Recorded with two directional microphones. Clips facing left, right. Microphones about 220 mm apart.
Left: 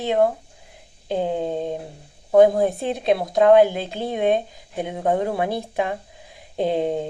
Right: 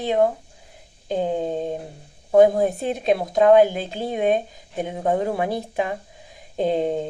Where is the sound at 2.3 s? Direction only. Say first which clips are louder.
Even; 10° right (ahead or behind).